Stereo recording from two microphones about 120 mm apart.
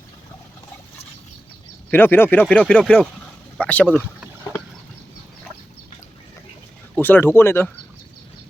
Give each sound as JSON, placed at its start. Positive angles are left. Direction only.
{"t": 1.9, "sound": "speech", "side_deg": 15}
{"t": 6.9, "sound": "speech", "side_deg": 15}